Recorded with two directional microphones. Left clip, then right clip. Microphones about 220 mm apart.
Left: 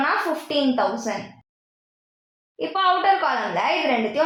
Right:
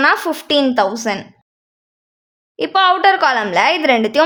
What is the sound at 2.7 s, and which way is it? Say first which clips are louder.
A woman's voice: right 7 dB; 50° right (ahead or behind).